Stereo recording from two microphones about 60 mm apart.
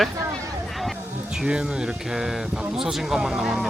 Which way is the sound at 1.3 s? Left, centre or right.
Centre.